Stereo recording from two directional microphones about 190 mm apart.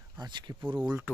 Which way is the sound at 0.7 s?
10° right (ahead or behind).